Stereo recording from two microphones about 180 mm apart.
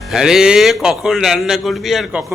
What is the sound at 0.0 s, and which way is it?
A man's voice, centre (ahead or behind).